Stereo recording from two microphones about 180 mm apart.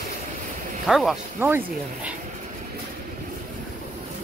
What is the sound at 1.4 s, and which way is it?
Speech, 15° right (ahead or behind).